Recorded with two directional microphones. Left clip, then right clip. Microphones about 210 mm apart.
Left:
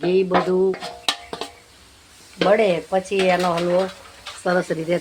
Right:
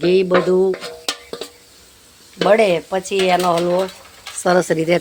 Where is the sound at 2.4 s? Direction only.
50° right (ahead or behind).